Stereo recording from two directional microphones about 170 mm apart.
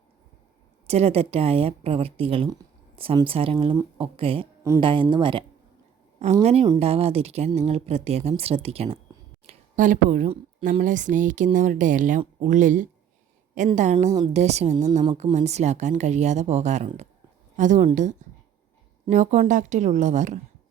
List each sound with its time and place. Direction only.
0.9 s speech: 35° right (ahead or behind)
6.1 s speech: 40° right (ahead or behind)
9.5 s a sound: 50° right (ahead or behind)
10.6 s a woman's voice: 50° right (ahead or behind)
18.2 s a sound: 45° right (ahead or behind)
19.1 s a woman's voice: 45° right (ahead or behind)